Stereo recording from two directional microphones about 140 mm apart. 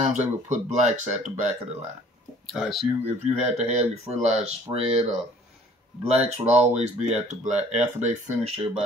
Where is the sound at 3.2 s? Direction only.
50° right (ahead or behind).